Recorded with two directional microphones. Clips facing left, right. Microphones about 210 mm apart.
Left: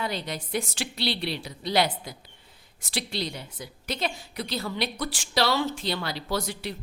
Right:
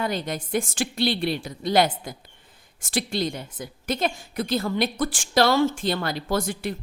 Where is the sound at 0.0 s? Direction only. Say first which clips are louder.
Right 4 dB; 50° right (ahead or behind).